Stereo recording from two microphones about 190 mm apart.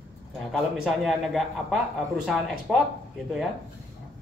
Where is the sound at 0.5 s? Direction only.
Centre (ahead or behind).